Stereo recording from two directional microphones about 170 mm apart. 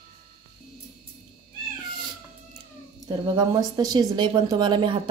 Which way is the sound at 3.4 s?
25° right (ahead or behind).